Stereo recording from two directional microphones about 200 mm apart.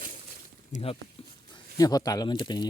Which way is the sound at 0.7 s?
30° left (ahead or behind).